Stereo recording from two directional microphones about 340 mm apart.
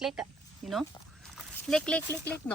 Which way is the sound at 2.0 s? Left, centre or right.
Centre.